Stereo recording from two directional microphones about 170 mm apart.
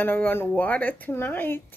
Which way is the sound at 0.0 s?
10° left (ahead or behind).